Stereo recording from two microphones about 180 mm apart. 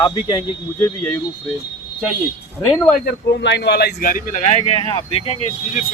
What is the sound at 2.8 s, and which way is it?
Speech, 50° left (ahead or behind).